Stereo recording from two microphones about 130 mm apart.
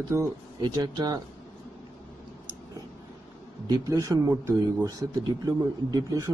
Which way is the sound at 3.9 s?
25° right (ahead or behind).